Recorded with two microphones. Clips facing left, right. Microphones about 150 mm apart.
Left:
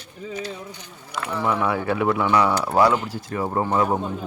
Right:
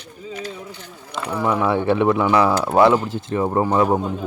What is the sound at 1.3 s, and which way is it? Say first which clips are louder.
Speech: right 3 dB; 15° right (ahead or behind).